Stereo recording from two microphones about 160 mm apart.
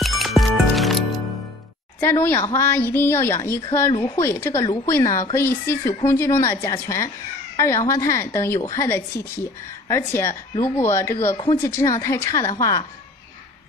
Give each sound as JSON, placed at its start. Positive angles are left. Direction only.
{"t": 0.0, "sound": "music", "side_deg": 0}
{"t": 2.0, "sound": "speech", "side_deg": 15}
{"t": 3.9, "sound": "a woman's voice", "side_deg": 30}
{"t": 4.2, "sound": "a woman's voice", "side_deg": 15}